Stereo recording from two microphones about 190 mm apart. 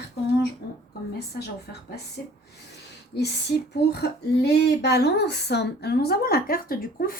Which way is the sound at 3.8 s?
60° left (ahead or behind).